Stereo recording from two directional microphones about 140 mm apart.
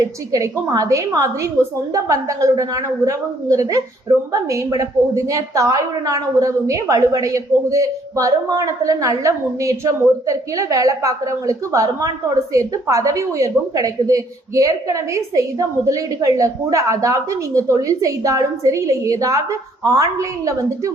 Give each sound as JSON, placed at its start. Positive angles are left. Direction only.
{"t": 0.0, "sound": "a woman's voice", "side_deg": -25}